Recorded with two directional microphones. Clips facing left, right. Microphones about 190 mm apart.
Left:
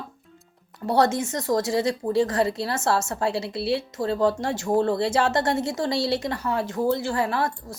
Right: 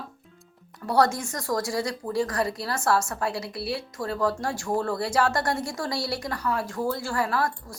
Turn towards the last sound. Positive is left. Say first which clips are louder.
# left 1 dB
turn(degrees=25)  # may be behind; listen again after turning